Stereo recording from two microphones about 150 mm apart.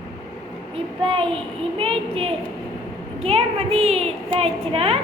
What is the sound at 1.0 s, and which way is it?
A woman's voice, 35° right (ahead or behind).